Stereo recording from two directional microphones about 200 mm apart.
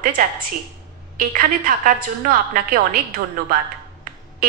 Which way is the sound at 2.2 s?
45° right (ahead or behind).